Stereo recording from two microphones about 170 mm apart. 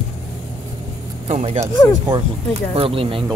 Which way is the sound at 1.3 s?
35° right (ahead or behind).